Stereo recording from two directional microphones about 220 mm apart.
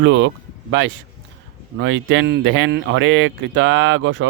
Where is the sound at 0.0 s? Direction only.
55° right (ahead or behind).